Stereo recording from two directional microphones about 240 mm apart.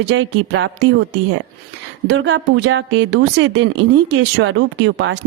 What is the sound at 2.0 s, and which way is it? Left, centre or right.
Speech, right.